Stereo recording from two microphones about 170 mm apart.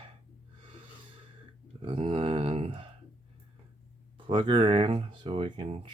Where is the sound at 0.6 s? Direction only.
30° right (ahead or behind).